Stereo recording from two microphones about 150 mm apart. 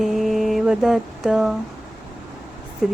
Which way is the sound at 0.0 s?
Centre (ahead or behind).